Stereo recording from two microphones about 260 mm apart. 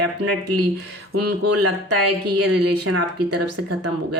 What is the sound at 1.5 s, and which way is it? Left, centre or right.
Speech, right.